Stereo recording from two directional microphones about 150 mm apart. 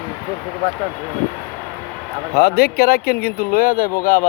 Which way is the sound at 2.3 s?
90° left.